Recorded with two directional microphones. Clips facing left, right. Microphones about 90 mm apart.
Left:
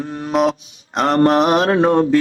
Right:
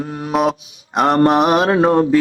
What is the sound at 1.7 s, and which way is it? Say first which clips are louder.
Music: right 1 dB; 25° right (ahead or behind).